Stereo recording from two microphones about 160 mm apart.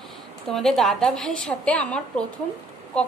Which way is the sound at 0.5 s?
Centre (ahead or behind).